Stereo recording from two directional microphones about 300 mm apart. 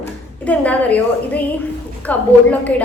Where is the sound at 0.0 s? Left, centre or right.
Centre.